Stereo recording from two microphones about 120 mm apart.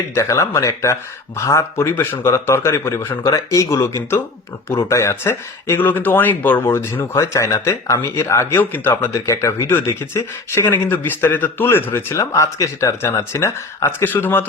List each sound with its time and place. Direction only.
0.1 s speech: 25° left (ahead or behind)